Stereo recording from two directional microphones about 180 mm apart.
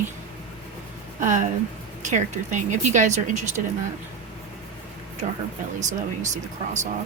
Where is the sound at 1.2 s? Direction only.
40° right (ahead or behind).